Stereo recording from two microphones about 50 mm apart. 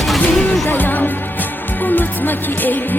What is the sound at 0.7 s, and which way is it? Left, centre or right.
Music, left.